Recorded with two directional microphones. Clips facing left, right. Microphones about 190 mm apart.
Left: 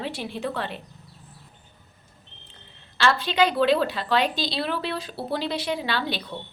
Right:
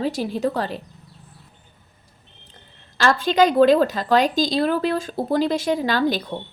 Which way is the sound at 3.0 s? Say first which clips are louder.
Right 4 dB; 45° right (ahead or behind).